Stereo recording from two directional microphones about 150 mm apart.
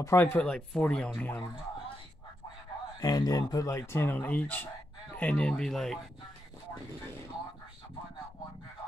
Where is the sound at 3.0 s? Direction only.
25° left (ahead or behind); by 6.0 s centre (ahead or behind).